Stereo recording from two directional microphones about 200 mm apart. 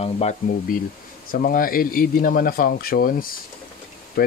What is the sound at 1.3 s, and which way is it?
Speech, 45° left (ahead or behind).